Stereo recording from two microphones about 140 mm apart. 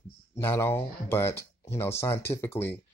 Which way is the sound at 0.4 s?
15° left (ahead or behind).